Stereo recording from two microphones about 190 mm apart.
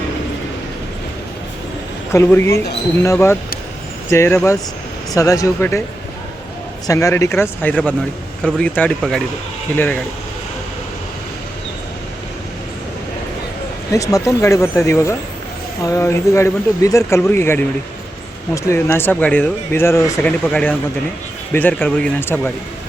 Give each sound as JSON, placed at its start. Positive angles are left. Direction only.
{"t": 2.1, "sound": "speech", "side_deg": 15}
{"t": 6.8, "sound": "speech", "side_deg": 15}
{"t": 13.9, "sound": "speech", "side_deg": 15}